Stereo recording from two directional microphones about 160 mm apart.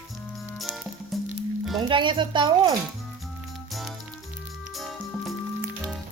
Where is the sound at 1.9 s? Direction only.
30° right (ahead or behind).